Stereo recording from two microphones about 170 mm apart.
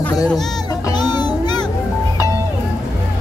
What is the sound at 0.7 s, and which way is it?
Music, 20° left (ahead or behind).